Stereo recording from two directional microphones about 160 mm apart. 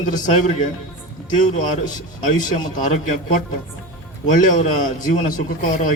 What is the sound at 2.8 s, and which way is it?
A man's voice, 50° left (ahead or behind).